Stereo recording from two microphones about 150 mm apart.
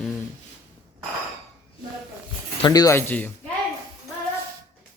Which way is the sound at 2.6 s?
25° left (ahead or behind).